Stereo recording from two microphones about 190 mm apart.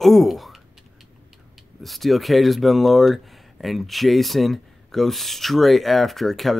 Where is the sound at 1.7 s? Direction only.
Centre (ahead or behind).